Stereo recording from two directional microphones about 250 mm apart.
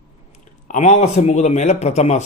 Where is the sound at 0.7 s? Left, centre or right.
Left.